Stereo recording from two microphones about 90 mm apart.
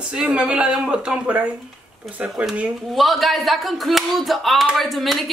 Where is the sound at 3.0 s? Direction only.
Centre (ahead or behind).